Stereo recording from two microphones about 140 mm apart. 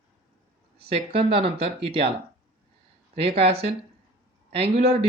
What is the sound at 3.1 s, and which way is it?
Speech, 45° right (ahead or behind).